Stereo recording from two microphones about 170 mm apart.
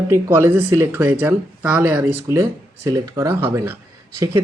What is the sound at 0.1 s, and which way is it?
Speech, 15° right (ahead or behind).